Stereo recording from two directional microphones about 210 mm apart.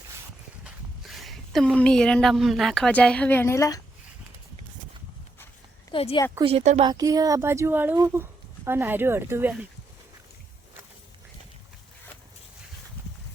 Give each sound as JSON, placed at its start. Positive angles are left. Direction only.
{"t": 0.6, "sound": "speech", "side_deg": 0}
{"t": 5.9, "sound": "speech", "side_deg": 25}
{"t": 6.4, "sound": "speech", "side_deg": -30}
{"t": 6.8, "sound": "speech", "side_deg": -15}